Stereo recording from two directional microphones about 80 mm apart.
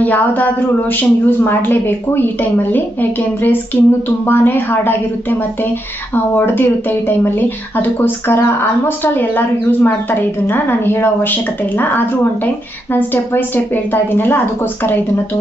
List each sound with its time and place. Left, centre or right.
0.0 s speech: left